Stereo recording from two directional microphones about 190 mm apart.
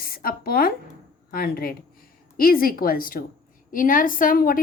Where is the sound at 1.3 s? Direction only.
50° left (ahead or behind).